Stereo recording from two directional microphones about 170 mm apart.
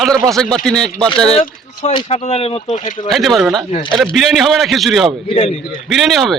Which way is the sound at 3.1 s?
Centre (ahead or behind).